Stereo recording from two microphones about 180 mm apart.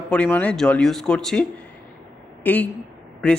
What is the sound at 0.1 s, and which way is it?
Speech, 10° left (ahead or behind).